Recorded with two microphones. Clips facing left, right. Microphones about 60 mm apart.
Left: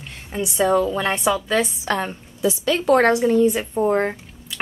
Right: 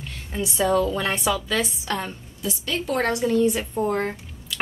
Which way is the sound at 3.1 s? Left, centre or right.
Centre.